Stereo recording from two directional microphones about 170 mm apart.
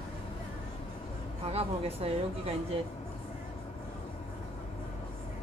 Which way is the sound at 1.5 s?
35° right (ahead or behind).